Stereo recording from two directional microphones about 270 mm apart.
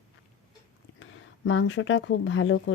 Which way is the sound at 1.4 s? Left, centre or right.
Left.